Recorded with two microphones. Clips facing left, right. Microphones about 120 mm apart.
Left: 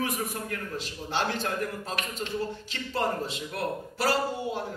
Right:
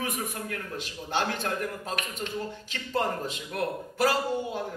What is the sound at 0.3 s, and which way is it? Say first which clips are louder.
A man's voice: left 1 dB; 45° right (ahead or behind).